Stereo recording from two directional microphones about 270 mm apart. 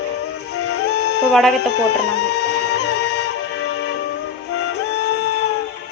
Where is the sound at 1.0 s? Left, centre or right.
Left.